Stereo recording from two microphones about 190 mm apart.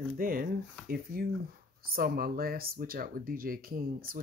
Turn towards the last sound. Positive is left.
turn(degrees=-50)  # may be behind; listen again after turning